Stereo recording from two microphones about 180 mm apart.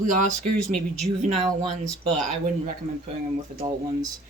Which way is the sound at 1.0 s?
35° right (ahead or behind).